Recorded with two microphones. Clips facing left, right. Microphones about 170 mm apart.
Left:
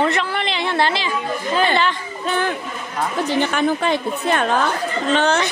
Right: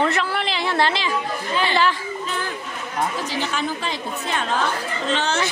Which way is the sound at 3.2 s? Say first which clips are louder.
Left 7 dB; 60° left (ahead or behind).